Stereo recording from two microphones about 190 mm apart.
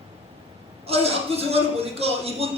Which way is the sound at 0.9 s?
30° right (ahead or behind).